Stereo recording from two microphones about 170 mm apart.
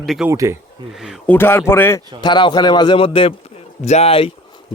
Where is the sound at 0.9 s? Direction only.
Centre (ahead or behind).